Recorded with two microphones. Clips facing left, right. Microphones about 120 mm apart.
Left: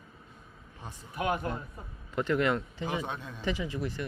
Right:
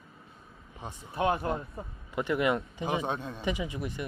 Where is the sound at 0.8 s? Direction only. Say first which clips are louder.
Right 5 dB; 25° right (ahead or behind).